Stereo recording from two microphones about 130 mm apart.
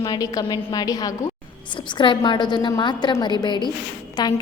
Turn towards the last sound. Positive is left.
turn(degrees=35)  # may be behind; listen again after turning